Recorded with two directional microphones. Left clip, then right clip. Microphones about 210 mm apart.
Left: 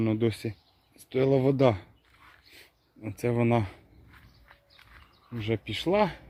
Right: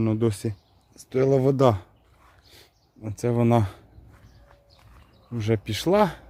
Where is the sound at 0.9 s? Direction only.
20° right (ahead or behind).